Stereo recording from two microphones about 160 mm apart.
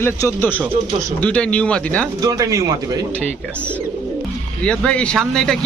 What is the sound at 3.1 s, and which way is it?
A man's voice, 10° left (ahead or behind).